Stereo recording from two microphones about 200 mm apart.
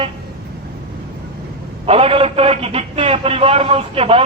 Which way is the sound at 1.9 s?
30° right (ahead or behind).